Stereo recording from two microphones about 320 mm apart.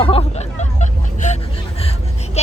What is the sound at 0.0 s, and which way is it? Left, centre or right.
Speech, centre.